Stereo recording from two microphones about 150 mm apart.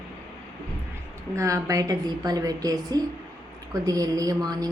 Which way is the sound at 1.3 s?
20° right (ahead or behind).